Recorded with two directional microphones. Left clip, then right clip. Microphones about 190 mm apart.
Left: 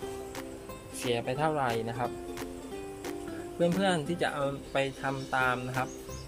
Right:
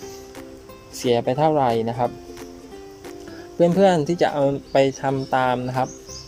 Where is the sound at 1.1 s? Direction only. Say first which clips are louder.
Right 11 dB; 30° right (ahead or behind).